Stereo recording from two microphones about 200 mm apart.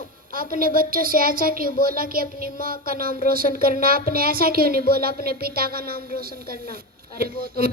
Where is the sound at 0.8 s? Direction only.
45° right (ahead or behind).